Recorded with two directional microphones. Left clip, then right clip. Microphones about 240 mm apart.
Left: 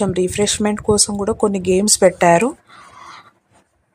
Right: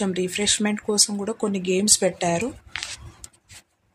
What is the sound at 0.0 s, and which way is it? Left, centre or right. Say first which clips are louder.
Speech: left 7 dB; centre.